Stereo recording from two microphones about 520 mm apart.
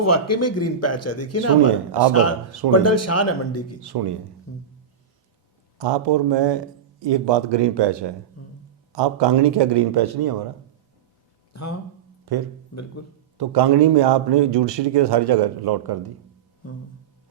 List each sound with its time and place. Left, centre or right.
0.0 s speech: left
3.8 s speech: right
4.5 s speech: left
5.8 s speech: right
8.4 s speech: left
8.9 s speech: right
11.5 s speech: left
12.2 s speech: right